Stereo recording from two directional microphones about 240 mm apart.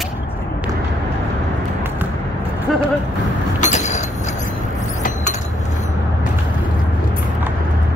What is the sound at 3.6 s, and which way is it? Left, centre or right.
Mechanisms, left.